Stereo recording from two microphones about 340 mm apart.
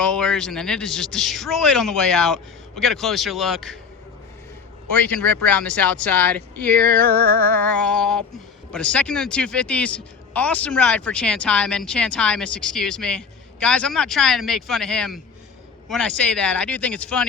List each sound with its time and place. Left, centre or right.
0.0 s speech: centre
4.9 s speech: centre